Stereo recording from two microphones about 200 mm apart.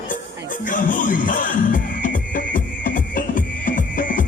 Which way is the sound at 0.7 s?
40° left (ahead or behind).